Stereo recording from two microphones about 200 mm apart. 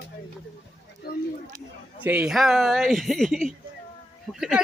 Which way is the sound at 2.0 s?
5° right (ahead or behind).